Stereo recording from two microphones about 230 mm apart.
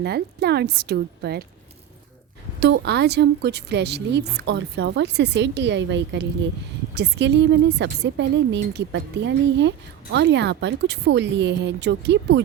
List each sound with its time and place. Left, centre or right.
0.0 s speech: right
2.6 s speech: right